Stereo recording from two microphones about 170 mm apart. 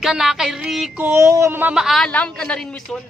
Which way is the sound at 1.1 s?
15° right (ahead or behind).